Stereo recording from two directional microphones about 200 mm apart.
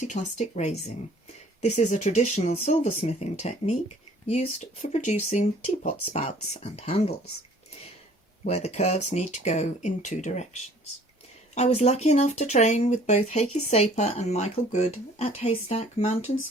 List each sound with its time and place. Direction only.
0.0 s speech: 35° left (ahead or behind)
8.4 s speech: 35° left (ahead or behind)